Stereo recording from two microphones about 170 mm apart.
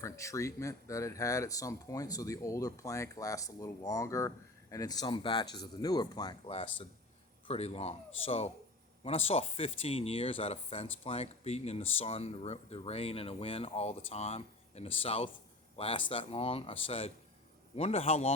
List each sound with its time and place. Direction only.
0.0 s speech: 15° left (ahead or behind)
6.5 s speech: 35° left (ahead or behind)